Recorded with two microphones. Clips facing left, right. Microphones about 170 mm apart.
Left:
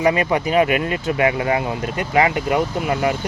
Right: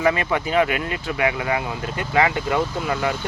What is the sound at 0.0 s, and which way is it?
Speech, 20° left (ahead or behind).